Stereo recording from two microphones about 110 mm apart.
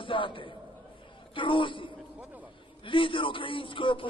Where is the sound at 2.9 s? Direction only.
50° left (ahead or behind).